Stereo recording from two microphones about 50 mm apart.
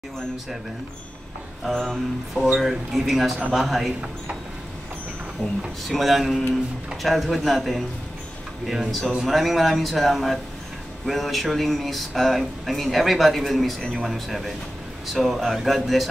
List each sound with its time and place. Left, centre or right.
1.7 s music: centre
2.3 s speech: centre
5.4 s music: centre
5.9 s speech: centre